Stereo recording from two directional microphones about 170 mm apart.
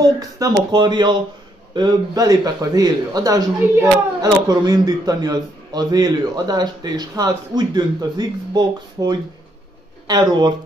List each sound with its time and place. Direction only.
0.0 s a man's voice: 20° right (ahead or behind)